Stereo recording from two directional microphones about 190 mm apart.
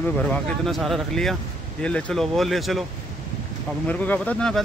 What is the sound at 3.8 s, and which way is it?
Speech, 10° left (ahead or behind).